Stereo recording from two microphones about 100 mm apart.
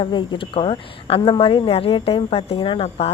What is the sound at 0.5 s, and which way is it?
A woman's voice, 65° left (ahead or behind).